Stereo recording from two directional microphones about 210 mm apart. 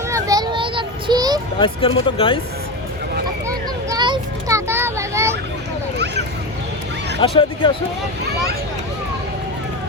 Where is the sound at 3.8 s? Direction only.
20° right (ahead or behind).